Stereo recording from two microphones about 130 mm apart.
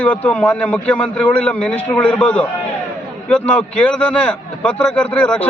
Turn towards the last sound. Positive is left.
turn(degrees=10)  # may be behind; listen again after turning